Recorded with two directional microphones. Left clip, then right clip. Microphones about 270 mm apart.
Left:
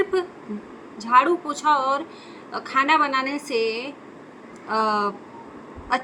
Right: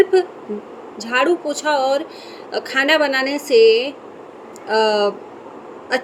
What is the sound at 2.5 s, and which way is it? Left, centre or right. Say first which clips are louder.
A woman's voice: right 3 dB; centre.